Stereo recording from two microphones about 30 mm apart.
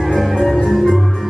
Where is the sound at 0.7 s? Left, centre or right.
Centre.